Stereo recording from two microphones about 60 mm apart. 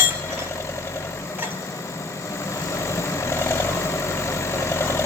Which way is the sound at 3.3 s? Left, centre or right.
Left.